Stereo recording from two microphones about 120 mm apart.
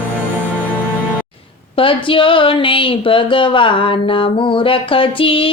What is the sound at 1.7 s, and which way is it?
Speech, 45° left (ahead or behind).